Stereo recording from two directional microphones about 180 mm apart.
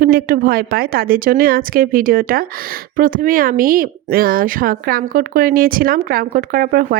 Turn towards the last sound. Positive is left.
turn(degrees=-55)  # may be behind; listen again after turning